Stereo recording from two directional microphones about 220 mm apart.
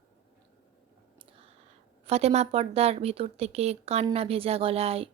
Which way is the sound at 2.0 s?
30° right (ahead or behind).